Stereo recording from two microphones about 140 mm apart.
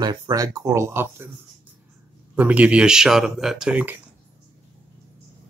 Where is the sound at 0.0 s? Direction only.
30° right (ahead or behind).